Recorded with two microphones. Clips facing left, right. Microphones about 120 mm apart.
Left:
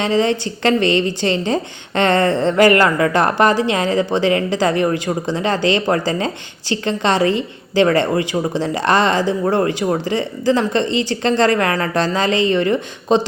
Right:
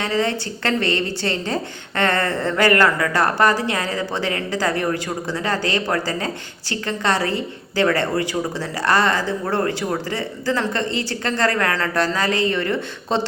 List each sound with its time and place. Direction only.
0.0 s a woman's voice: 20° left (ahead or behind)